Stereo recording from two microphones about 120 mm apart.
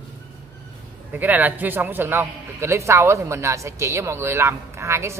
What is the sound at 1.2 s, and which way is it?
A man's voice, 15° right (ahead or behind).